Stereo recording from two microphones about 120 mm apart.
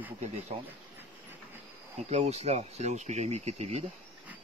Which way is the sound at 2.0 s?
65° right (ahead or behind).